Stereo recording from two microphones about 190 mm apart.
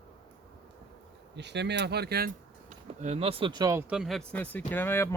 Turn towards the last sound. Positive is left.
turn(degrees=10)  # may be behind; listen again after turning